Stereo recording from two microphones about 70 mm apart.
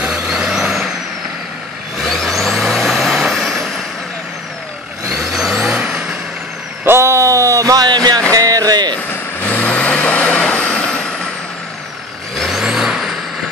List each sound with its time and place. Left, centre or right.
0.0 s vehicle: centre
2.0 s vehicle: centre
5.1 s vehicle: centre
5.8 s vehicle: centre
6.8 s a sound: right
8.3 s a sound: right
9.1 s vehicle: left
12.4 s vehicle: centre